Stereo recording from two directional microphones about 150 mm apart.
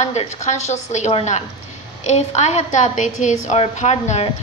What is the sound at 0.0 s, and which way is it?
A woman's voice, 50° left (ahead or behind).